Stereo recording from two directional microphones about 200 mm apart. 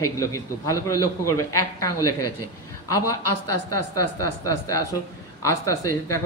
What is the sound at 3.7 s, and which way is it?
A woman's voice, 15° left (ahead or behind).